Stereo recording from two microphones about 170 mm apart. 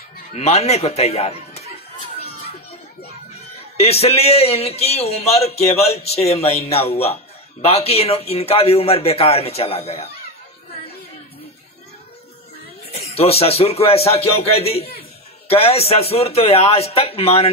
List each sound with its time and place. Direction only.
0.3 s speech: 40° left (ahead or behind)
3.7 s speech: 40° left (ahead or behind)
13.1 s speech: 35° left (ahead or behind)